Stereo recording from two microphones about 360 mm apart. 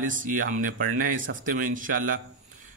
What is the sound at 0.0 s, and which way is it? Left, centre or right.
Speech, right.